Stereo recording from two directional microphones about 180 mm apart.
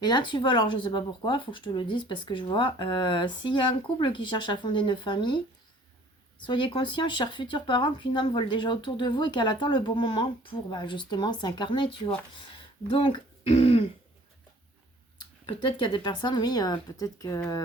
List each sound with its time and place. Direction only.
0.0 s speech: 25° left (ahead or behind)
6.4 s speech: 25° left (ahead or behind)
15.4 s speech: 25° left (ahead or behind)